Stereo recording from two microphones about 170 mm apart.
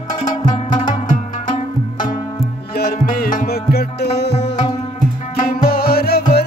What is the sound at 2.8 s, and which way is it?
Music, 60° left (ahead or behind).